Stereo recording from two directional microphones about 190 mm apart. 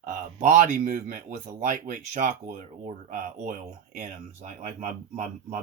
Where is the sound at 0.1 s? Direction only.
40° right (ahead or behind).